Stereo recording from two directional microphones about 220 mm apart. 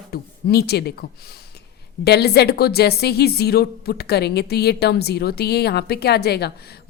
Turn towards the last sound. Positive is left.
turn(degrees=45)  # may be behind; listen again after turning